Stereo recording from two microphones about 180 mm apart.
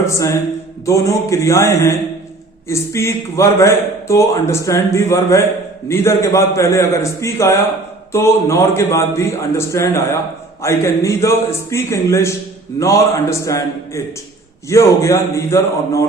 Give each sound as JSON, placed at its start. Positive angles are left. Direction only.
{"t": 0.1, "sound": "a man's voice", "side_deg": 20}